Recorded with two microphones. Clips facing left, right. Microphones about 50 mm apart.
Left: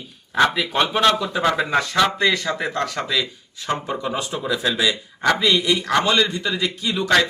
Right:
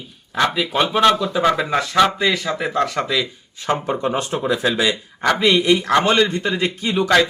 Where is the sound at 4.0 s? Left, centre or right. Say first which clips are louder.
Right 4 dB; right.